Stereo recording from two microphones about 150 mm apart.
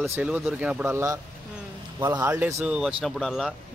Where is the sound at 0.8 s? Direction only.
20° right (ahead or behind).